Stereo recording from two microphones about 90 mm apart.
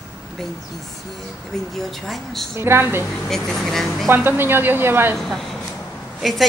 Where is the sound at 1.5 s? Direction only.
5° left (ahead or behind).